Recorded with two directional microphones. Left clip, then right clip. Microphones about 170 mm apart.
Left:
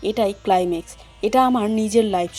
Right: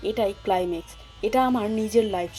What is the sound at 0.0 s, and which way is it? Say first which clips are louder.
Speech: left 4 dB; 25° left (ahead or behind).